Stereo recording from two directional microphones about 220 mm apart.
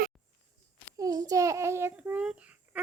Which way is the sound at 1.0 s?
15° right (ahead or behind).